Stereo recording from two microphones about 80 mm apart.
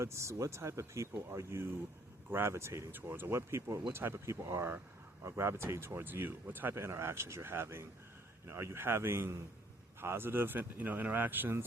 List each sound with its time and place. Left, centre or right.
0.0 s speech: right